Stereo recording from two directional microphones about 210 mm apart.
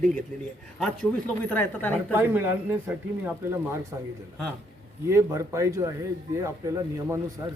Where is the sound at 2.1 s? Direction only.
10° right (ahead or behind).